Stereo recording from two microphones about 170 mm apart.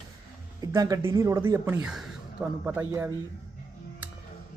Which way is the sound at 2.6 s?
15° right (ahead or behind).